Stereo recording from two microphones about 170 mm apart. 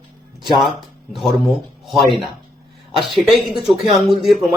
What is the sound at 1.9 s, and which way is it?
A man's voice, centre (ahead or behind).